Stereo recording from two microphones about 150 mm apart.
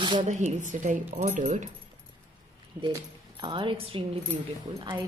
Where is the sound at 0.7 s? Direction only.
60° right (ahead or behind).